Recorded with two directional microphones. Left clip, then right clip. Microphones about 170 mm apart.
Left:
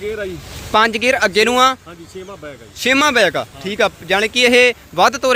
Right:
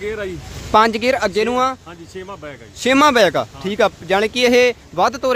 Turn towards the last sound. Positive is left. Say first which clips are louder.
# left 3 dB
turn(degrees=0)  # may be behind; listen again after turning